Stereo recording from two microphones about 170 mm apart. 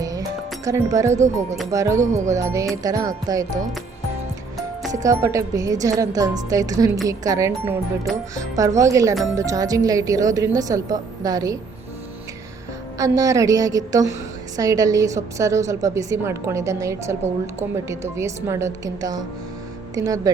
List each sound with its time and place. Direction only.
0.0 s music: 20° right (ahead or behind)
1.7 s a woman's voice: 20° right (ahead or behind)
5.0 s a woman's voice: 20° right (ahead or behind)
13.0 s a woman's voice: 20° right (ahead or behind)